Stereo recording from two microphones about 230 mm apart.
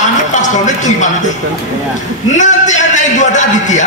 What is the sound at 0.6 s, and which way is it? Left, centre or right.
Music, left.